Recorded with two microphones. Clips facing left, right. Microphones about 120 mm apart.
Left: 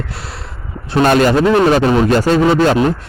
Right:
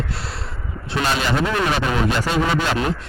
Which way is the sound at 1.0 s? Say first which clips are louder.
Left 10 dB; 50° left (ahead or behind).